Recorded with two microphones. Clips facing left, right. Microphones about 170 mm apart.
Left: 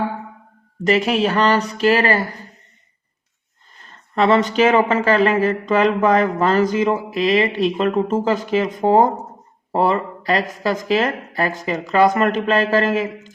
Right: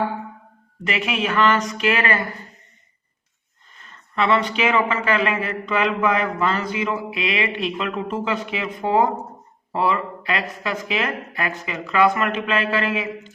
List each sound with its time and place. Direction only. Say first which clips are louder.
0.9 s speech: left 7 dB; 40° left (ahead or behind)
3.8 s speech: left 5 dB; 35° left (ahead or behind)